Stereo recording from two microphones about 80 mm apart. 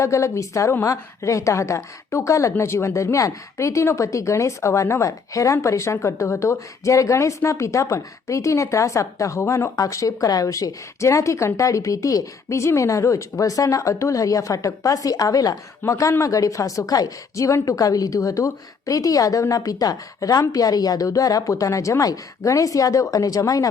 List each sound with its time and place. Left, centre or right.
0.0 s a woman's voice: left
9.7 s a woman's voice: left